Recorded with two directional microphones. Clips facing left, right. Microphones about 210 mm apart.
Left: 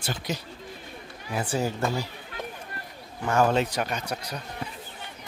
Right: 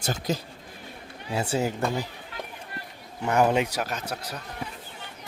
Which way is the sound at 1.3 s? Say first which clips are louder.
Right 1 dB; 25° right (ahead or behind).